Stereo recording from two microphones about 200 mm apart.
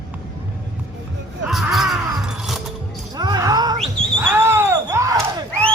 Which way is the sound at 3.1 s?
20° right (ahead or behind).